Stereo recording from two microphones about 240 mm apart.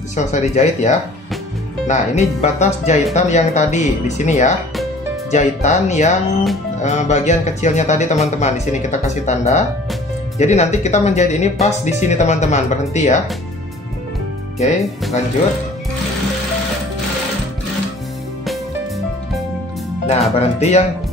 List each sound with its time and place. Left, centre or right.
0.1 s speech: left
14.6 s speech: left
20.1 s speech: left